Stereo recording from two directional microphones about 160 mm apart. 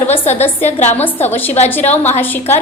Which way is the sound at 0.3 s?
10° left (ahead or behind).